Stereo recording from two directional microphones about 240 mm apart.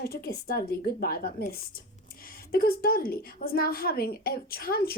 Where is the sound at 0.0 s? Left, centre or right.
Left.